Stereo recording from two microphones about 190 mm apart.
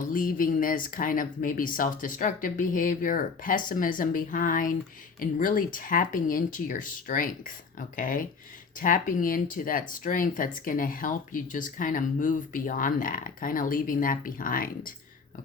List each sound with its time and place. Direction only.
0.0 s speech: 45° left (ahead or behind)